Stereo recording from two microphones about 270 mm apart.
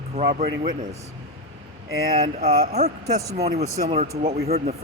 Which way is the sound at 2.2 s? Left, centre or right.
Right.